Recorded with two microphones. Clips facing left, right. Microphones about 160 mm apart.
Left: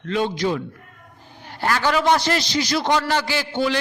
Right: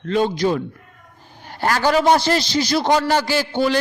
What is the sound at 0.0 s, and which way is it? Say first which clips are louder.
A man's voice: right 3 dB; 40° right (ahead or behind).